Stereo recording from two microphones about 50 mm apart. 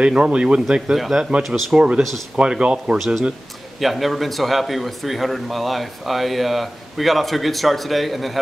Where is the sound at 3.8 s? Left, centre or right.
Centre.